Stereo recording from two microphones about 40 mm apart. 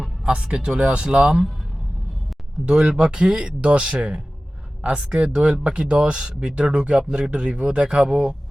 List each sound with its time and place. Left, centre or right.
0.0 s music: right
0.8 s speech: right
2.6 s speech: right